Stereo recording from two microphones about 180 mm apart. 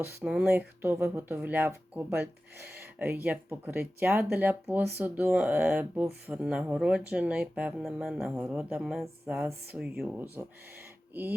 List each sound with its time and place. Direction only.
0.2 s speech: 10° right (ahead or behind)